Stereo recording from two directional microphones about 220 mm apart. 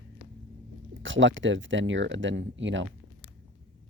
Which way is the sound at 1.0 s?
60° right (ahead or behind).